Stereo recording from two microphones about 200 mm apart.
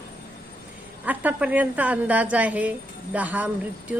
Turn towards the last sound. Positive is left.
turn(degrees=-5)  # may be behind; listen again after turning